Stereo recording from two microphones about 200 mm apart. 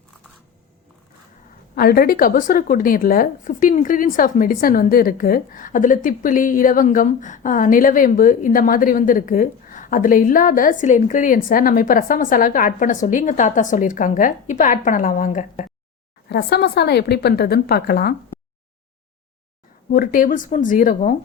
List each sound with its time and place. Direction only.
1.7 s a woman's voice: 50° left (ahead or behind)
16.3 s a woman's voice: 55° left (ahead or behind)
19.9 s a woman's voice: 45° left (ahead or behind)